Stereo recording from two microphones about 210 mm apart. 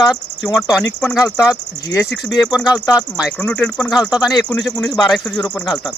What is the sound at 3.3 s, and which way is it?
Speech, 5° left (ahead or behind).